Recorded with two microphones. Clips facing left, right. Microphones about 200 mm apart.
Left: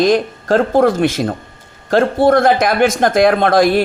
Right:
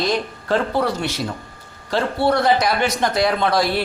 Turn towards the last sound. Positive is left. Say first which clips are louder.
# left 7 dB
turn(degrees=50)  # may be behind; listen again after turning